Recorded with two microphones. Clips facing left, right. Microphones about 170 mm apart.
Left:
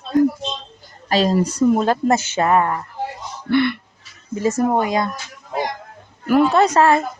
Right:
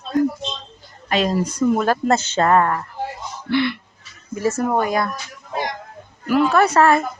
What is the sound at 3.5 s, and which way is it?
Speech, 50° left (ahead or behind).